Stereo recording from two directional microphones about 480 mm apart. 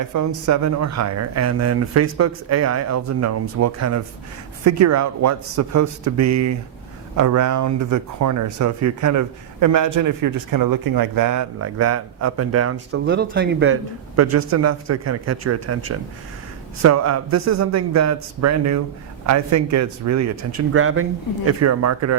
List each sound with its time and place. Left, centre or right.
0.0 s speech: right
14.2 s speech: right